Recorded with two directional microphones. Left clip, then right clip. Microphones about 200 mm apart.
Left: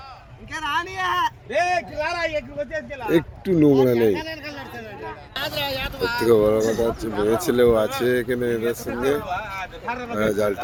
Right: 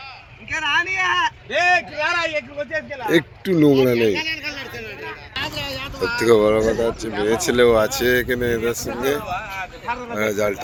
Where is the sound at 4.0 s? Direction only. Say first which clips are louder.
Right 2 dB; 40° left (ahead or behind).